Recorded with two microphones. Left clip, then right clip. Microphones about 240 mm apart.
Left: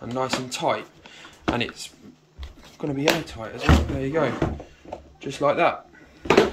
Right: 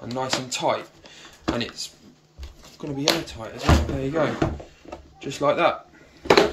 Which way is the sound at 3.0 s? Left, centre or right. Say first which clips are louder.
Even; centre.